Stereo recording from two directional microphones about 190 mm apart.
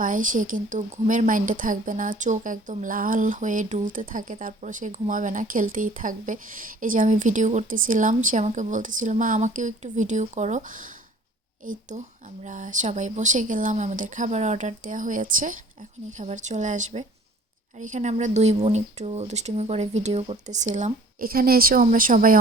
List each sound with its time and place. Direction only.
0.0 s speech: 45° right (ahead or behind)